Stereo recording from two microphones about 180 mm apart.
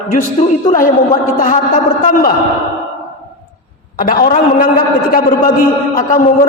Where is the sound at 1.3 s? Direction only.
50° left (ahead or behind).